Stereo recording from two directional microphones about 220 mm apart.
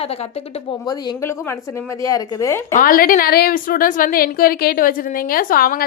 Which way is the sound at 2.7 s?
40° left (ahead or behind).